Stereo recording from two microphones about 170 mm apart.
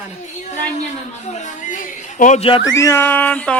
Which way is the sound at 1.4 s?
50° left (ahead or behind).